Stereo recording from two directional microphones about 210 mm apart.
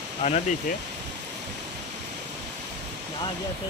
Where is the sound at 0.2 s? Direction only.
25° left (ahead or behind).